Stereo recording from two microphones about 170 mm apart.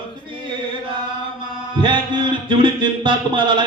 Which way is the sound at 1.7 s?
25° right (ahead or behind).